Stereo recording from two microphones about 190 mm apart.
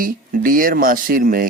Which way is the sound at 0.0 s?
50° right (ahead or behind).